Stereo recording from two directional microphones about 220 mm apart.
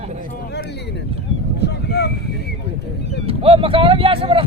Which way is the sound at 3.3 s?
25° right (ahead or behind).